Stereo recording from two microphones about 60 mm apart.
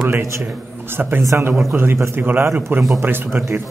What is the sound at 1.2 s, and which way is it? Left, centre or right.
Speech, right.